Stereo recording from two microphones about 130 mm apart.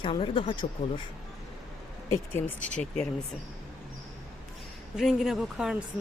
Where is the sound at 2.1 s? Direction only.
15° left (ahead or behind).